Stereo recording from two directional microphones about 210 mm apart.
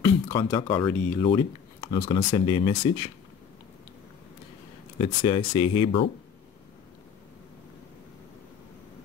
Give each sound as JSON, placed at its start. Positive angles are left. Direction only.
{"t": 0.0, "sound": "speech", "side_deg": 15}
{"t": 5.0, "sound": "speech", "side_deg": 20}